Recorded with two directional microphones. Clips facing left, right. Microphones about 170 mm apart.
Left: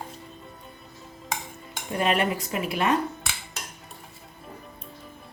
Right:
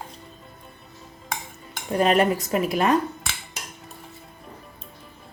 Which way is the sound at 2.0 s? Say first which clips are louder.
Right 5 dB; 40° right (ahead or behind).